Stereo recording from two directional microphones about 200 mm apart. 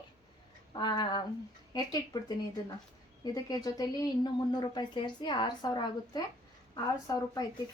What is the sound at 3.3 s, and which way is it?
A woman's voice, 20° left (ahead or behind).